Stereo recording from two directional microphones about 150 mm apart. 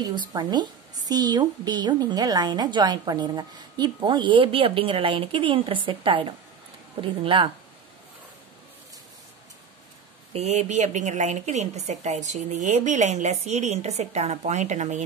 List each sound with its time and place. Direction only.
0.3 s a woman's voice: 30° right (ahead or behind)
10.3 s a woman's voice: 45° right (ahead or behind)